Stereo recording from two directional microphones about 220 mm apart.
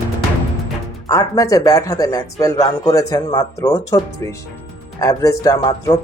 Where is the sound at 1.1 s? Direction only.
15° left (ahead or behind).